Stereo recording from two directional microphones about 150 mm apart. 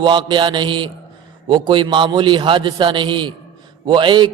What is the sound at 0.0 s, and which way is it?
A man's voice, 30° right (ahead or behind).